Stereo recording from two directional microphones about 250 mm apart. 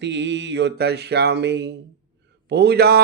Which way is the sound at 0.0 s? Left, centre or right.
Right.